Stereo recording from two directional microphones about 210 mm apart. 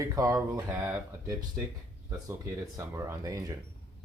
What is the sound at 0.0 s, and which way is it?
Speech, 15° right (ahead or behind).